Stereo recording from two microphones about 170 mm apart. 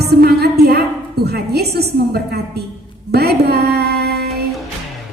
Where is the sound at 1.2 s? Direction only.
70° right (ahead or behind).